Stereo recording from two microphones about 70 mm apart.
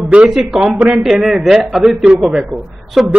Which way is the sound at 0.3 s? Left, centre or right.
Centre.